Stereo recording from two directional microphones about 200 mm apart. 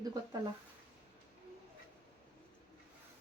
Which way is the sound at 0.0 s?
20° right (ahead or behind).